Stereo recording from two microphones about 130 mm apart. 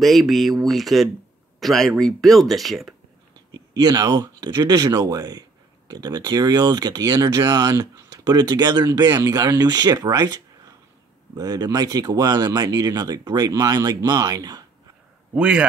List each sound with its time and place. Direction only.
0.0 s speech: centre (ahead or behind)
3.5 s speech: 30° right (ahead or behind)
15.3 s a man's voice: 10° right (ahead or behind)